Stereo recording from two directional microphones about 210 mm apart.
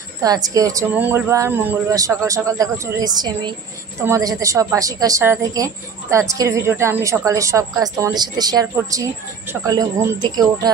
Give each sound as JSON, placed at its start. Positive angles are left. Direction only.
{"t": 0.2, "sound": "a woman's voice", "side_deg": -15}